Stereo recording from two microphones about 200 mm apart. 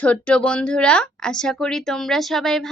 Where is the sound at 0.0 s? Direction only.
5° left (ahead or behind).